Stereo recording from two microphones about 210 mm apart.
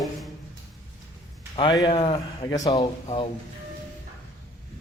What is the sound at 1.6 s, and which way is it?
Speech, 20° left (ahead or behind).